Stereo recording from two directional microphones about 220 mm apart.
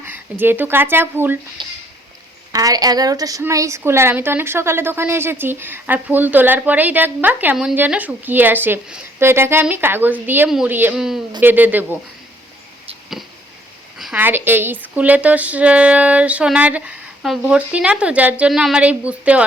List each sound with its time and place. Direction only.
0.0 s speech: 10° right (ahead or behind)
1.6 s a woman's voice: 20° right (ahead or behind)
14.0 s a woman's voice: 5° right (ahead or behind)